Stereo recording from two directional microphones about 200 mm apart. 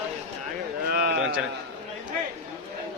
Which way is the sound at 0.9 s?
55° right (ahead or behind).